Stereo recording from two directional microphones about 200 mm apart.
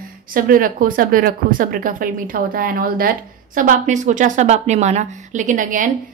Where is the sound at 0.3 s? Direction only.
45° right (ahead or behind).